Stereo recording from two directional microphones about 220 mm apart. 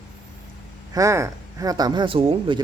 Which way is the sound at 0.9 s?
15° right (ahead or behind).